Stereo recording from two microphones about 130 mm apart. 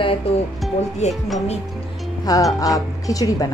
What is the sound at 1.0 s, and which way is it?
Speech, 60° left (ahead or behind).